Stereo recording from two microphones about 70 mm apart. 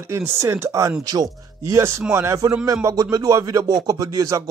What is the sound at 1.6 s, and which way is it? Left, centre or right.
Speech, right.